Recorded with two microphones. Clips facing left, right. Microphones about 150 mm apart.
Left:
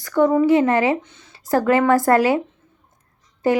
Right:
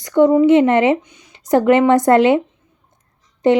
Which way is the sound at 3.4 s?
20° right (ahead or behind).